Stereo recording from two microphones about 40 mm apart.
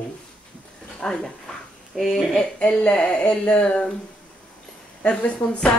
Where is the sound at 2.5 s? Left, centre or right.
Left.